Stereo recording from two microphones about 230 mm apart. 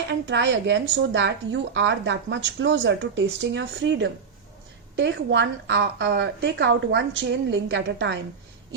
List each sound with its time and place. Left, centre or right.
0.3 s a woman's voice: right